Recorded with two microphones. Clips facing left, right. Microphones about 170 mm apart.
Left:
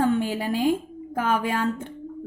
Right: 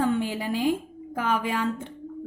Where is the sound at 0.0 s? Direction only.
45° left (ahead or behind).